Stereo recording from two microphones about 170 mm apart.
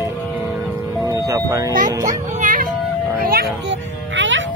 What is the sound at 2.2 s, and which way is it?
Music, 50° right (ahead or behind).